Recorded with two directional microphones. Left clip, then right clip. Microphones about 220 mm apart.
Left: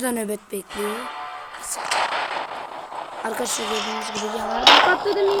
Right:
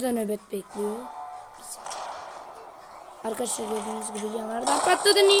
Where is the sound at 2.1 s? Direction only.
40° left (ahead or behind).